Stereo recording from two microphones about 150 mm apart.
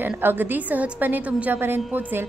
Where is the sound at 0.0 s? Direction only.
15° right (ahead or behind).